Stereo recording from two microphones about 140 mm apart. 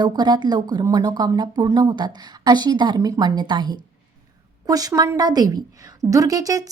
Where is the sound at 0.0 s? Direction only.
30° right (ahead or behind).